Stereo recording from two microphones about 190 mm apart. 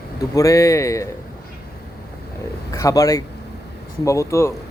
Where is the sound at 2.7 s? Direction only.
15° left (ahead or behind).